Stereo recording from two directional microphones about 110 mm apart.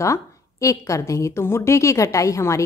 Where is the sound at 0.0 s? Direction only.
30° left (ahead or behind).